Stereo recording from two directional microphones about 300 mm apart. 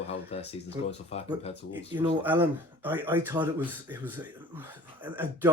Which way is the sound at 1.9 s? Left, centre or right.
Centre.